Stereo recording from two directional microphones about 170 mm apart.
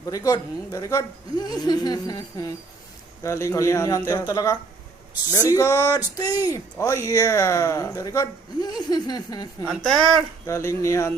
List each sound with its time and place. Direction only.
0.0 s speech: 20° left (ahead or behind)
9.6 s speech: centre (ahead or behind)
10.4 s speech: 15° left (ahead or behind)